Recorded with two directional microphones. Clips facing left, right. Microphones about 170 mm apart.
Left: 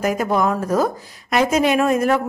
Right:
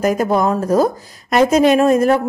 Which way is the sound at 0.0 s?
35° right (ahead or behind).